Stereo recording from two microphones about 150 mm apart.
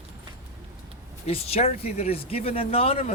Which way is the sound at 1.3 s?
40° left (ahead or behind).